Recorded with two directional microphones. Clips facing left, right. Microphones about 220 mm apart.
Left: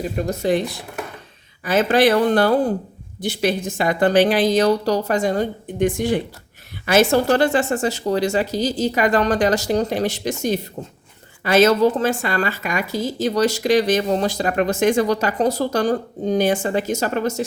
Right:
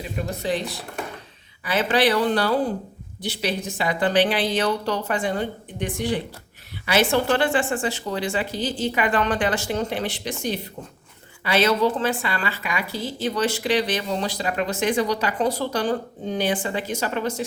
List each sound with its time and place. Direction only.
0.3 s a woman's voice: 45° left (ahead or behind)
1.6 s a woman's voice: 45° left (ahead or behind)